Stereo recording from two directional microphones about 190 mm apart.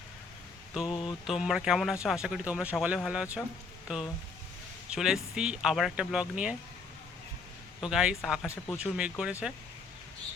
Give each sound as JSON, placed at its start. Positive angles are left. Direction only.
{"t": 0.9, "sound": "mantra", "side_deg": 25}
{"t": 1.3, "sound": "speech", "side_deg": -5}
{"t": 7.8, "sound": "speech", "side_deg": -5}